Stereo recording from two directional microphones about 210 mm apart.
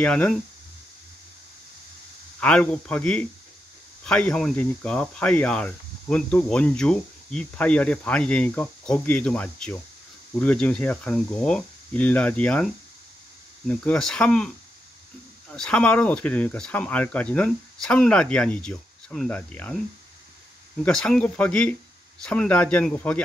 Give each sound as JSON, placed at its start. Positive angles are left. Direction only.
{"t": 0.0, "sound": "speech", "side_deg": 5}
{"t": 2.4, "sound": "speech", "side_deg": 5}
{"t": 15.5, "sound": "speech", "side_deg": 5}
{"t": 20.8, "sound": "speech", "side_deg": 5}